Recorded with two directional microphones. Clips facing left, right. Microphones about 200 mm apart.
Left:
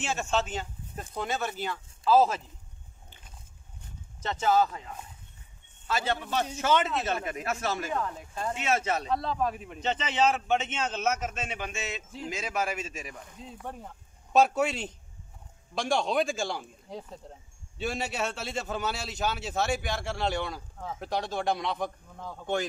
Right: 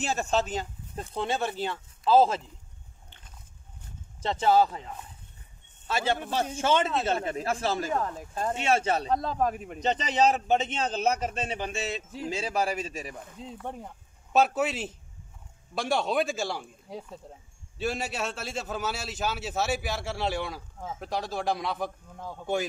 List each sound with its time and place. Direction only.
0.0 s speech: 35° right (ahead or behind)
4.2 s a man's voice: 30° right (ahead or behind)
5.9 s a man's voice: 30° right (ahead or behind)
8.5 s a man's voice: 30° right (ahead or behind)
9.1 s a man's voice: 45° right (ahead or behind)
14.3 s a man's voice: 5° right (ahead or behind)